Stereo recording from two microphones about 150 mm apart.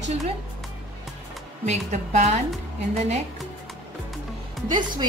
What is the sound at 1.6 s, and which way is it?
Speech, 45° right (ahead or behind).